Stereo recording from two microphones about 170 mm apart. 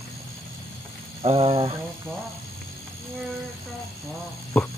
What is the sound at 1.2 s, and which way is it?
Speech, 35° right (ahead or behind).